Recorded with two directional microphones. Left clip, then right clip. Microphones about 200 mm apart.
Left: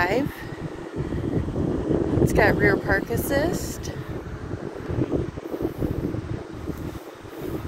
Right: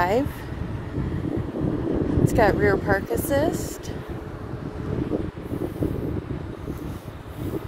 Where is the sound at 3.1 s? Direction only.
15° right (ahead or behind).